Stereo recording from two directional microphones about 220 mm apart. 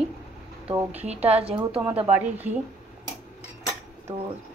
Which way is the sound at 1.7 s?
5° right (ahead or behind).